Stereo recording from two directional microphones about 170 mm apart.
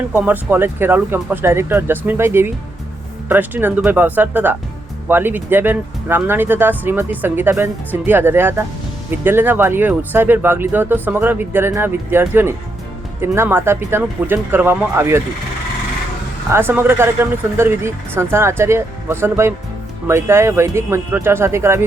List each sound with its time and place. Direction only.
0.3 s speech: 10° right (ahead or behind)
16.5 s speech: 15° right (ahead or behind)